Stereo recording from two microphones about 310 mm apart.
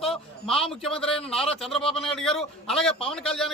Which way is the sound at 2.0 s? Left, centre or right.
Centre.